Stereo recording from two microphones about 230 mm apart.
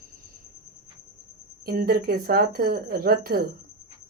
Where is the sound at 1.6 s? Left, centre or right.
Right.